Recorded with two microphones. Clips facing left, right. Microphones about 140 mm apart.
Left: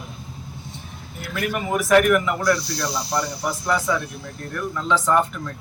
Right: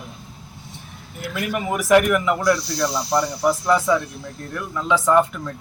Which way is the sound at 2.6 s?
Centre (ahead or behind).